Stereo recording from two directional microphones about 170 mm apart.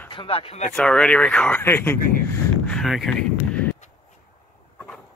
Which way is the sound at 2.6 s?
Centre (ahead or behind).